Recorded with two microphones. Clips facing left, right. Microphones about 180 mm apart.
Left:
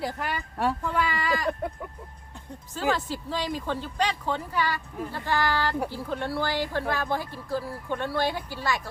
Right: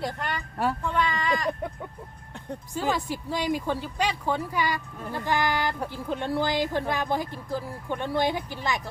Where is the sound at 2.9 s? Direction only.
15° right (ahead or behind).